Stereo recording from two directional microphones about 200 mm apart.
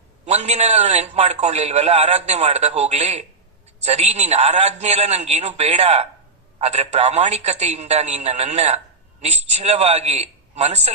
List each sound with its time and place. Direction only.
0.3 s a man's voice: 35° right (ahead or behind)